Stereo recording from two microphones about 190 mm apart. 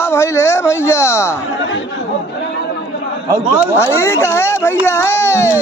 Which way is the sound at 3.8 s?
15° left (ahead or behind).